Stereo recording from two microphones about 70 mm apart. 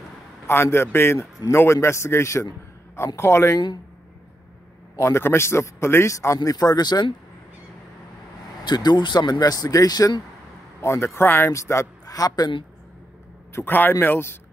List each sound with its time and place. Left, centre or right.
0.5 s speech: left
4.9 s speech: left
6.1 s speech: left
8.6 s speech: left
10.8 s a man's voice: left
11.5 s speech: left
13.7 s speech: left